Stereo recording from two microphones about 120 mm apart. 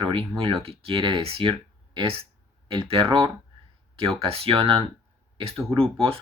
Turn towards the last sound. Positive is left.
turn(degrees=-50)  # may be behind; listen again after turning